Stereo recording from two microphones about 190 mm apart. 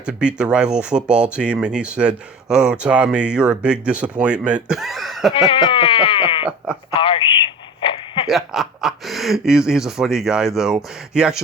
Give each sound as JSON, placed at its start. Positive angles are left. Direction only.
{"t": 0.0, "sound": "speech", "side_deg": -5}
{"t": 5.3, "sound": "sheep", "side_deg": 30}
{"t": 6.9, "sound": "radio", "side_deg": 30}
{"t": 8.3, "sound": "speech", "side_deg": 0}